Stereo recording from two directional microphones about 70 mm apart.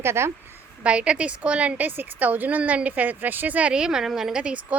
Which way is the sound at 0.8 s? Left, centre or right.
Centre.